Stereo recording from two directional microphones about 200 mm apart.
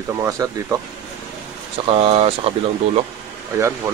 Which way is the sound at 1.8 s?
30° right (ahead or behind).